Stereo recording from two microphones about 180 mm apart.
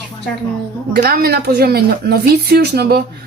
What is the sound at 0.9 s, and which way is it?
Speech, 60° right (ahead or behind).